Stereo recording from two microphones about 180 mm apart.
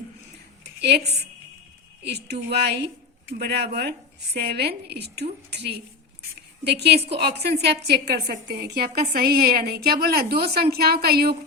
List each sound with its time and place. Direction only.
0.6 s a woman's voice: 65° right (ahead or behind)